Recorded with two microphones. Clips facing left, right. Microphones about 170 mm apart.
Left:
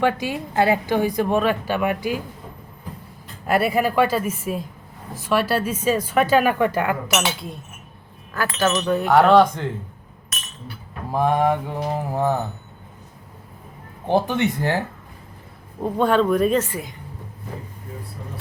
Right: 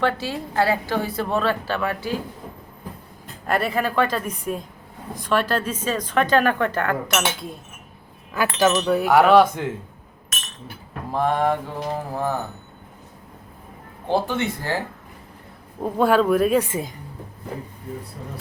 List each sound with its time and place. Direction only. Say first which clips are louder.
0.0 s a woman's voice: left 2 dB; 15° left (ahead or behind)
3.4 s a woman's voice: left 3 dB; 10° left (ahead or behind)
7.3 s speech: even; centre (ahead or behind)
8.3 s speech: right 2 dB; 10° right (ahead or behind)
11.1 s a woman's voice: left 2 dB; 10° left (ahead or behind)
14.1 s a woman's voice: left 3 dB; 15° left (ahead or behind)
15.8 s speech: even; 5° right (ahead or behind)
16.6 s a woman's voice: right 2 dB; 20° right (ahead or behind)